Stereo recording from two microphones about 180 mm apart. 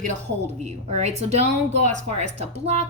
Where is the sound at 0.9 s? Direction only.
40° right (ahead or behind).